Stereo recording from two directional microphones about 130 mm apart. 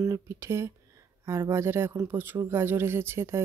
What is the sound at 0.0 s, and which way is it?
Speech, 25° right (ahead or behind).